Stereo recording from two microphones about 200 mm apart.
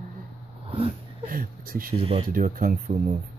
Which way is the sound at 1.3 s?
45° right (ahead or behind).